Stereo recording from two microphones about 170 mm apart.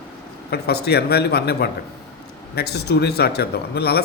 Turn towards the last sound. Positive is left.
turn(degrees=70)  # may be behind; listen again after turning